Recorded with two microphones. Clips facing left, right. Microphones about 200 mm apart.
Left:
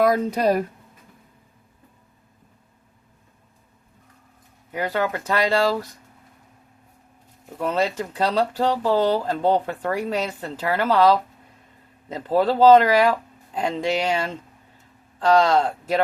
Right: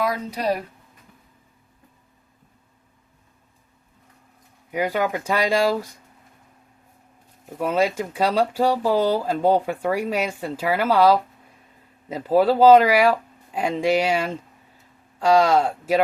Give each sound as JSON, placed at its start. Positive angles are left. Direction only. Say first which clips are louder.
{"t": 0.0, "sound": "speech", "louder": "left 6 dB", "side_deg": 50}
{"t": 4.7, "sound": "speech", "louder": "right 1 dB", "side_deg": -10}
{"t": 7.6, "sound": "speech", "louder": "right 2 dB", "side_deg": -10}